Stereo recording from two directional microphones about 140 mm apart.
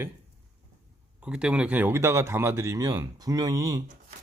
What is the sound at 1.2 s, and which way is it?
Speech, 5° right (ahead or behind).